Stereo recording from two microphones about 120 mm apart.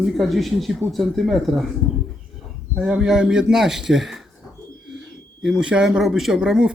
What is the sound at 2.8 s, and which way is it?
Speech, 5° right (ahead or behind).